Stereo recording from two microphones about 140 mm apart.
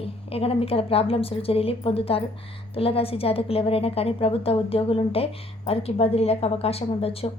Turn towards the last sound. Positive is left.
turn(degrees=45)  # may be behind; listen again after turning